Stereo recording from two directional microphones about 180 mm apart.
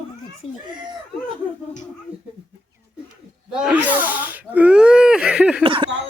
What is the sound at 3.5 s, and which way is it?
Speech, 5° right (ahead or behind).